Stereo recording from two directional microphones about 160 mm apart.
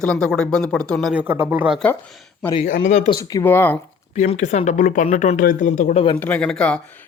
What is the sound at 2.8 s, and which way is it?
Speech, 45° left (ahead or behind).